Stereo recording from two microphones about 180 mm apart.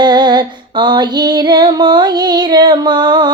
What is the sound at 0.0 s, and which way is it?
Female singing, 25° right (ahead or behind).